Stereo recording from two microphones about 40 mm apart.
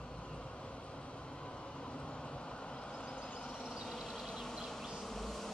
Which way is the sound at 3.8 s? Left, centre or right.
Centre.